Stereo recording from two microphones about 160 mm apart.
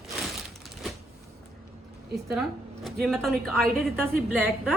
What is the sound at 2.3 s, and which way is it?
A woman's voice, centre (ahead or behind).